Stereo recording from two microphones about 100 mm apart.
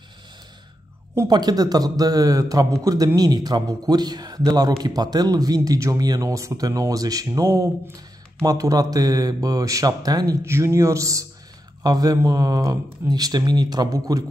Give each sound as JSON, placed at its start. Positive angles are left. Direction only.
{"t": 1.3, "sound": "speech", "side_deg": -40}